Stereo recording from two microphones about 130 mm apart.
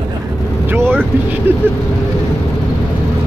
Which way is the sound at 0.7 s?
15° right (ahead or behind).